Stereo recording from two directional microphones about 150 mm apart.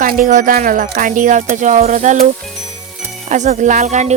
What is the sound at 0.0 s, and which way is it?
Speech, 70° right (ahead or behind).